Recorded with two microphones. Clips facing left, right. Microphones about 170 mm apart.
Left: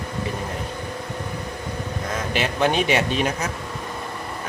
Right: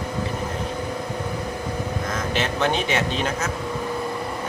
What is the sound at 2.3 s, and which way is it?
Speech, 10° left (ahead or behind).